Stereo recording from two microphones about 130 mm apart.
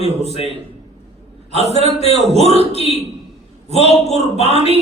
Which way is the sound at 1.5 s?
55° left (ahead or behind).